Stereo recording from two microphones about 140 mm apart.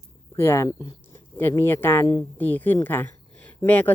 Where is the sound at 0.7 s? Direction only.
35° left (ahead or behind).